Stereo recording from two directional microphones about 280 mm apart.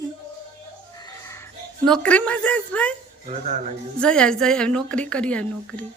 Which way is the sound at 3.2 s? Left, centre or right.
Right.